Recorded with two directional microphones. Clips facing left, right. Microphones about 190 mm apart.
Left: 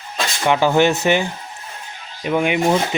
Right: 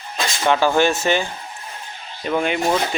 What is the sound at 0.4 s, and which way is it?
A man's voice, 15° left (ahead or behind).